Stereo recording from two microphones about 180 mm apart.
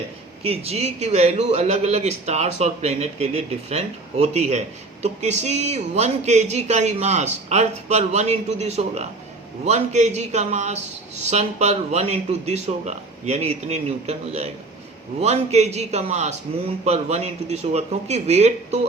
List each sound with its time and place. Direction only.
0.4 s speech: 35° right (ahead or behind)